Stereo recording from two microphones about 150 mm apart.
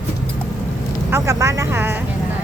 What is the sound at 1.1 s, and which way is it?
Speech, 20° right (ahead or behind).